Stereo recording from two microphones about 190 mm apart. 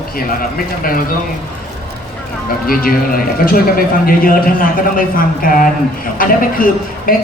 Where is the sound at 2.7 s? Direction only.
50° left (ahead or behind).